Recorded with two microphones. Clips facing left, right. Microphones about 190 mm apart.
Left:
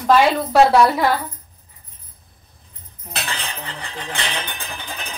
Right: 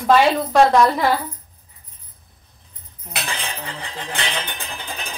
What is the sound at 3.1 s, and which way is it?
Cutlery, 10° right (ahead or behind).